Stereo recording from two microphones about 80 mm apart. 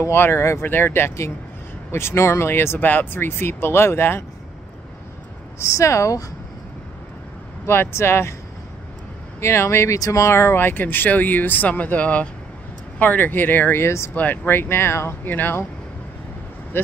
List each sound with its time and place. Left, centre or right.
0.0 s speech: left
5.6 s speech: left
7.6 s speech: left
9.4 s speech: left
14.1 s speech: left
16.7 s speech: left